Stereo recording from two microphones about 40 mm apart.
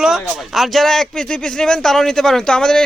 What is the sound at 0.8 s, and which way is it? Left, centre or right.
Speech, centre.